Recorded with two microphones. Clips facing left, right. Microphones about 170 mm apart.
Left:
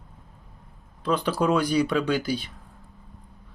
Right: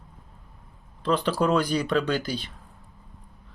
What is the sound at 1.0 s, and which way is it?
Speech, 10° left (ahead or behind).